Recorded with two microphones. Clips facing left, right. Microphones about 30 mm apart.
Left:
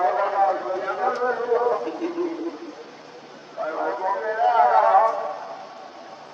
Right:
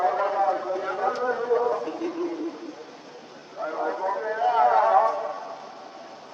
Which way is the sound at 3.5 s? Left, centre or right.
Centre.